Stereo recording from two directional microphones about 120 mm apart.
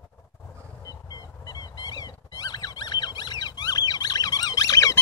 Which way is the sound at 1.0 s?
35° left (ahead or behind).